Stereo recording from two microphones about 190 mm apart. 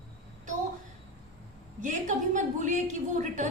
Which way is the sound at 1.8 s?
40° right (ahead or behind).